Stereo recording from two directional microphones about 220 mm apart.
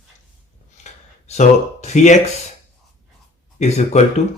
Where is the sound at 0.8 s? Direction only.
30° left (ahead or behind).